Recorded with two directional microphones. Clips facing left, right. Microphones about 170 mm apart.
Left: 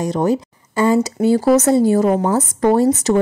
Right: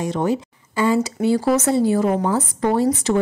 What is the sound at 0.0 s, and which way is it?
Speech, 40° left (ahead or behind).